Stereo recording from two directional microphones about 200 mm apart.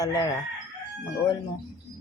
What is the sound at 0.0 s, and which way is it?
Speech, 20° left (ahead or behind).